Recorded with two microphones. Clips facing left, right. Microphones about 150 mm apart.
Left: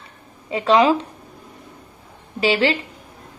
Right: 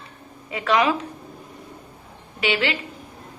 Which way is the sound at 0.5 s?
30° left (ahead or behind).